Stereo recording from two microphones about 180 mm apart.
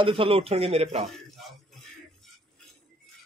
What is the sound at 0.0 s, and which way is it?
Speech, 30° right (ahead or behind).